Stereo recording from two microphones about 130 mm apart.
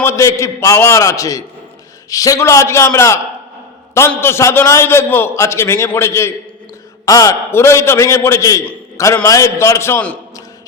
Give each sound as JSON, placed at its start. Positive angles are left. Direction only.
{"t": 0.0, "sound": "a man's voice", "side_deg": 20}